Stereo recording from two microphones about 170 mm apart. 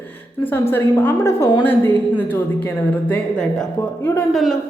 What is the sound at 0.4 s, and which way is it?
A woman's voice, 15° left (ahead or behind).